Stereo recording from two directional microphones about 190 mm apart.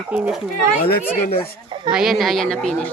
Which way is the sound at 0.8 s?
55° left (ahead or behind).